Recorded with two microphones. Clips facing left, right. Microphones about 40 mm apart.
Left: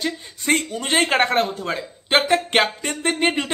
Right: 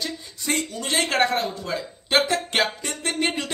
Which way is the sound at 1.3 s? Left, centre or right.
Left.